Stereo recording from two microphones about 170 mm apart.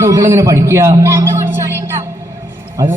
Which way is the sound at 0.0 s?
15° right (ahead or behind).